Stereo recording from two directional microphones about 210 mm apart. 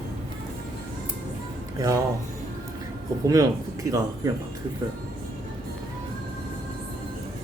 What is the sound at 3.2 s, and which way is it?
Speech, 15° right (ahead or behind).